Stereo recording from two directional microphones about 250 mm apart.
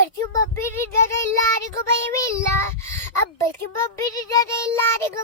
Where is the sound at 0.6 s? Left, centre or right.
Centre.